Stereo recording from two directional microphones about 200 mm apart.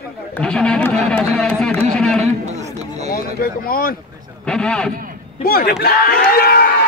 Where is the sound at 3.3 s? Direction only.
45° left (ahead or behind).